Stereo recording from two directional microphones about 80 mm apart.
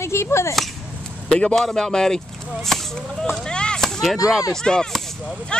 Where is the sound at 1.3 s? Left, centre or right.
Centre.